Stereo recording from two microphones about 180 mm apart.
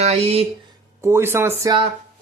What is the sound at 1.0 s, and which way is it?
Speech, 15° right (ahead or behind).